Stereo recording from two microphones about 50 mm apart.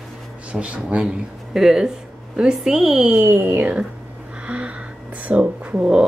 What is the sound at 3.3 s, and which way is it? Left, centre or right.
Speech, right.